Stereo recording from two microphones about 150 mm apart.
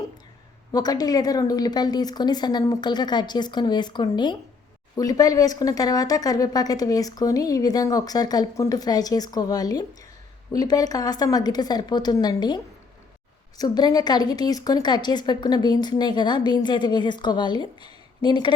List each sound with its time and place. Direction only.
0.7 s speech: 25° left (ahead or behind)
13.6 s speech: 25° left (ahead or behind)